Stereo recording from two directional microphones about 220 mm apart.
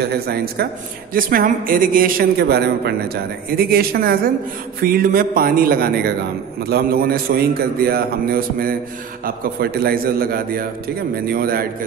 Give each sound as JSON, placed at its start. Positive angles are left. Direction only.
{"t": 0.0, "sound": "a man's voice", "side_deg": -45}